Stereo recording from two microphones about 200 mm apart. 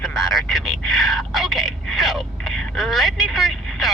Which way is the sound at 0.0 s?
Centre (ahead or behind).